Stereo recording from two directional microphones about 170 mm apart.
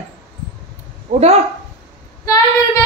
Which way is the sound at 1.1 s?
55° right (ahead or behind).